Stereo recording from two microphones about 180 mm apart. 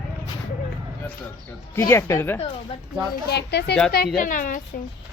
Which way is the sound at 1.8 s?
15° left (ahead or behind).